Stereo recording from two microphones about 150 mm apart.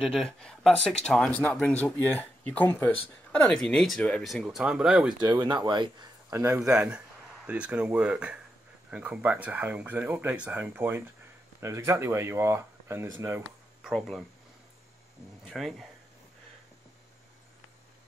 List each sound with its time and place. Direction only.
0.1 s speech: 5° left (ahead or behind)
5.2 s speech: 30° right (ahead or behind)
6.3 s speech: 20° right (ahead or behind)
6.7 s speech: 5° right (ahead or behind)
13.8 s speech: centre (ahead or behind)
15.4 s speech: centre (ahead or behind)